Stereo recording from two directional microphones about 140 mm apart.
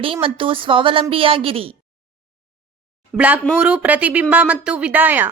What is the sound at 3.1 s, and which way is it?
Speech, 10° right (ahead or behind).